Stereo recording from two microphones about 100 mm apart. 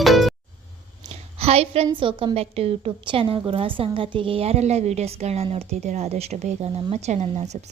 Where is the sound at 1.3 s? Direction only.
90° right.